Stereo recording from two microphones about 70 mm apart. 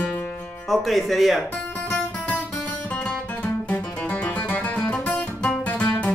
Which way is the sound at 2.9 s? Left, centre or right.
Centre.